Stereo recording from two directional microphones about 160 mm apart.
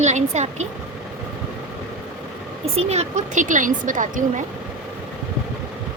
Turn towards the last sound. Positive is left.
turn(degrees=-55)  # may be behind; listen again after turning